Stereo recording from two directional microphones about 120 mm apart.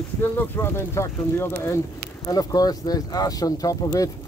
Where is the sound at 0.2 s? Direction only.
20° left (ahead or behind).